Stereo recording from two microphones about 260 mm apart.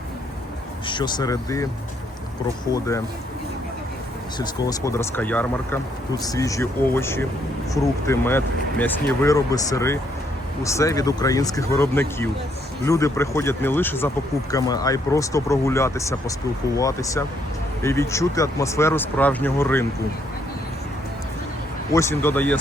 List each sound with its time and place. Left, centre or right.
0.9 s speech: centre
4.4 s speech: centre
21.9 s speech: centre